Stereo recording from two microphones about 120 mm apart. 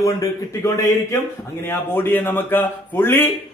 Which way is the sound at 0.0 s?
30° left (ahead or behind).